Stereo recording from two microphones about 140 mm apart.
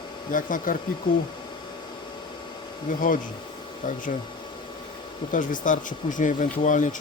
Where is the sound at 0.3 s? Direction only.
70° left (ahead or behind).